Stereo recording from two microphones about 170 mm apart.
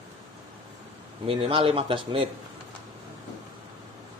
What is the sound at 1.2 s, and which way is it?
Speech, 35° right (ahead or behind).